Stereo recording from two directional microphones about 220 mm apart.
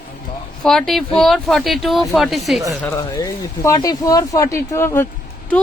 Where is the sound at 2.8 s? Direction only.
15° left (ahead or behind).